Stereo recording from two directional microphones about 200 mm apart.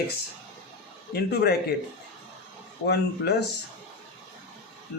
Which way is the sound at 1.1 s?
50° left (ahead or behind).